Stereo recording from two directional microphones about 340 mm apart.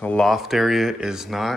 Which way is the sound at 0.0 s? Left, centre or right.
Centre.